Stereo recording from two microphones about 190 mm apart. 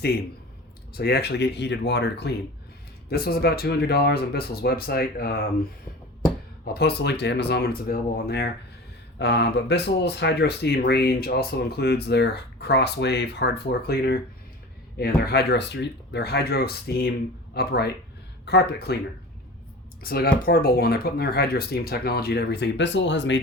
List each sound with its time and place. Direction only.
0.9 s speech: 55° left (ahead or behind)
6.7 s speech: 60° left (ahead or behind)
20.0 s speech: 55° left (ahead or behind); by 23.4 s 70° left (ahead or behind)